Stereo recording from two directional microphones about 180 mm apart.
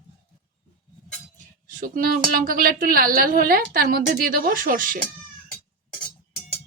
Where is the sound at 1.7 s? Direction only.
50° right (ahead or behind).